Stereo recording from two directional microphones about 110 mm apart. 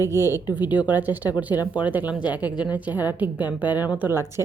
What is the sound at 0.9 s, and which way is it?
A woman's voice, 15° right (ahead or behind).